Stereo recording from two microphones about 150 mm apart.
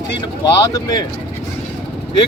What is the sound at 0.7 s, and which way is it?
Speech, 25° left (ahead or behind).